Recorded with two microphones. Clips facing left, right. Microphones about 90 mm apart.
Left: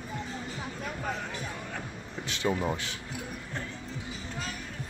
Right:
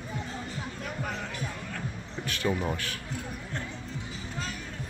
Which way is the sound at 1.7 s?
20° left (ahead or behind).